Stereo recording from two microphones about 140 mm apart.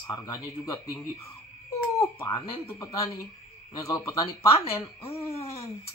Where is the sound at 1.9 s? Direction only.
25° left (ahead or behind).